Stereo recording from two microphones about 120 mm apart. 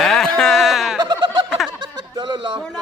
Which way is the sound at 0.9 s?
35° right (ahead or behind).